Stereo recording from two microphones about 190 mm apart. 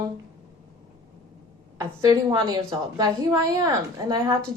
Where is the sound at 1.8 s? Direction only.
20° right (ahead or behind).